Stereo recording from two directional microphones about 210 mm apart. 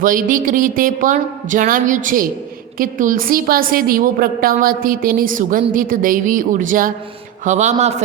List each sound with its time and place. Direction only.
0.0 s a woman's voice: 40° right (ahead or behind)